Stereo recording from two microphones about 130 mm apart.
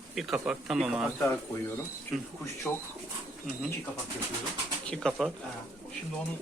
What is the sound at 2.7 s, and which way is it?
Speech, 15° left (ahead or behind).